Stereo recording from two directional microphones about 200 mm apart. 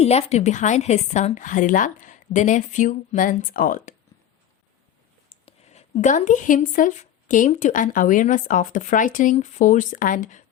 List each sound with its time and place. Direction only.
0.0 s speech: 30° left (ahead or behind)
5.5 s speech: 35° left (ahead or behind)